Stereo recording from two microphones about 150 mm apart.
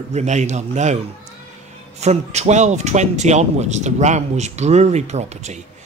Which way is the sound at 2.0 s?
50° right (ahead or behind).